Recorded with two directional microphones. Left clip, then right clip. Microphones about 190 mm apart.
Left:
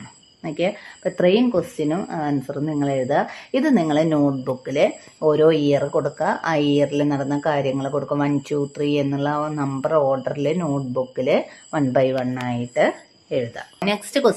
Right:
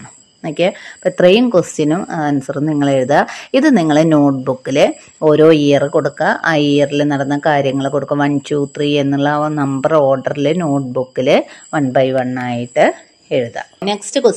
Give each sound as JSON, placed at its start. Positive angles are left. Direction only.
{"t": 0.4, "sound": "speech", "side_deg": -35}
{"t": 11.9, "sound": "a woman's voice", "side_deg": -15}
{"t": 13.8, "sound": "a woman's voice", "side_deg": -10}